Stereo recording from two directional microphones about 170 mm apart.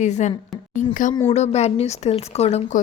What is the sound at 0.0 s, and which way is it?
A woman's voice, 45° left (ahead or behind).